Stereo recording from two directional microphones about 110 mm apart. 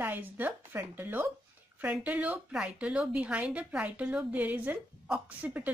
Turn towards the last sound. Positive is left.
turn(degrees=-15)  # may be behind; listen again after turning